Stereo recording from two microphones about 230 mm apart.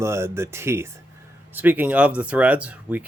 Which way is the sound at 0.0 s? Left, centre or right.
Centre.